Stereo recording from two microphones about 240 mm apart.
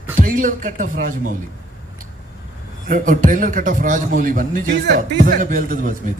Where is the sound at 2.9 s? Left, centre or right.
Right.